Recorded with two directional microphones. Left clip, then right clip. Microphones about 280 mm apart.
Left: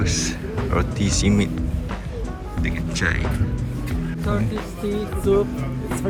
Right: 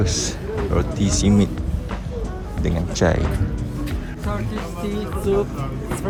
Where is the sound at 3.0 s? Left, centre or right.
Centre.